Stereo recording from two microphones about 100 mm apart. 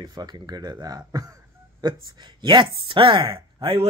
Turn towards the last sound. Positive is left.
turn(degrees=-60)  # may be behind; listen again after turning